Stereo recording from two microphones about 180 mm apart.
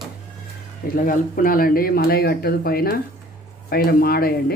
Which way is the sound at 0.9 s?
50° left (ahead or behind).